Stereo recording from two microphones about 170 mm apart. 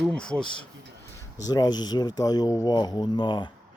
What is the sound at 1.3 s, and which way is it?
Speech, 20° left (ahead or behind).